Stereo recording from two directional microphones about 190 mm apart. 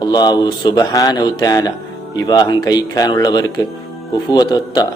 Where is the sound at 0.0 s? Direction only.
20° left (ahead or behind).